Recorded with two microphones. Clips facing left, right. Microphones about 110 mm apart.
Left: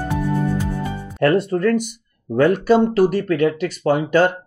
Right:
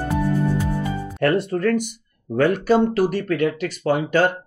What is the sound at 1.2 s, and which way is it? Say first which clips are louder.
Speech: left 3 dB; 35° left (ahead or behind).